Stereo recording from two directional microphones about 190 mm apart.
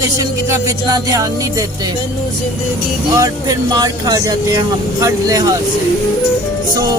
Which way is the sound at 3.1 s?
20° right (ahead or behind).